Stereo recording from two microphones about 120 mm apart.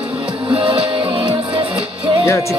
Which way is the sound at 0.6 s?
45° right (ahead or behind).